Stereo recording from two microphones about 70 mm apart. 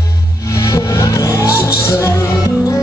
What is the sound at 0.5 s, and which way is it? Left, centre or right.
Music, left.